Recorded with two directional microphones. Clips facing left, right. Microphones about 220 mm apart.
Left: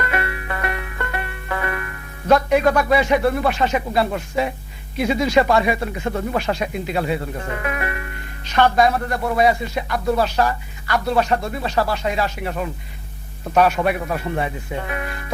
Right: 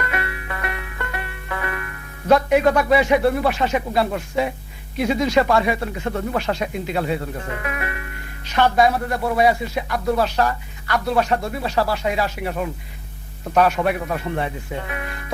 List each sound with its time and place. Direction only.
0.1 s music: 40° left (ahead or behind)
2.2 s speech: 10° right (ahead or behind)
7.6 s speech: 40° left (ahead or behind)
8.5 s speech: 10° right (ahead or behind)
13.5 s speech: 5° left (ahead or behind)